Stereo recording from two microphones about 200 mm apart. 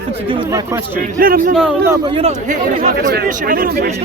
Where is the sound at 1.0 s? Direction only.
45° right (ahead or behind).